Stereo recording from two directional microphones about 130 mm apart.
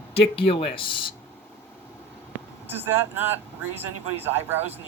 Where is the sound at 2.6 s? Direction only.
15° right (ahead or behind).